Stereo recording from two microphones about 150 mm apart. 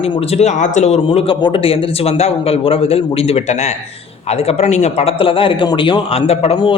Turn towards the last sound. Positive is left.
turn(degrees=35)  # may be behind; listen again after turning